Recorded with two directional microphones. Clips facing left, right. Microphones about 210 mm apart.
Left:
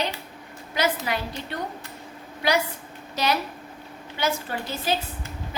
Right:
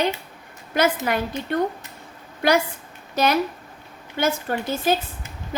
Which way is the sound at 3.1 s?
50° right (ahead or behind).